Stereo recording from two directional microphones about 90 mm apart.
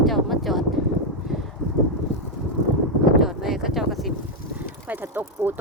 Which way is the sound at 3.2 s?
5° right (ahead or behind).